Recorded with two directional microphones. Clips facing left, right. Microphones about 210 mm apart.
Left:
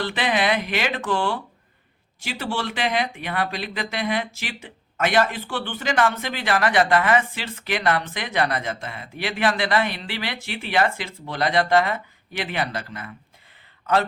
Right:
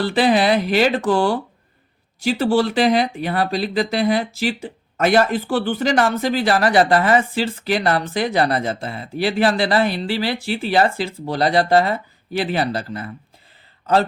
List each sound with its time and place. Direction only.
0.0 s speech: 35° right (ahead or behind)